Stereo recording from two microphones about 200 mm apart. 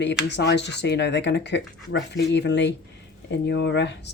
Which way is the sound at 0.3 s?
60° left (ahead or behind).